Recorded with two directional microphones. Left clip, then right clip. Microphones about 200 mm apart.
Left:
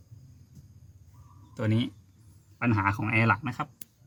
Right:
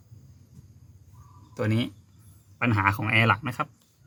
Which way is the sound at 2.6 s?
35° right (ahead or behind).